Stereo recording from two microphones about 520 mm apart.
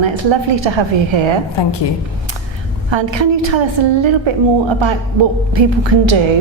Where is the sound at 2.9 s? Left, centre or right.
Right.